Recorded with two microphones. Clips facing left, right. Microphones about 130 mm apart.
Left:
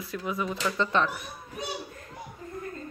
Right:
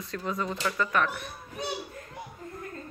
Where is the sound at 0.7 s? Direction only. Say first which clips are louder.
Left 2 dB; 25° left (ahead or behind).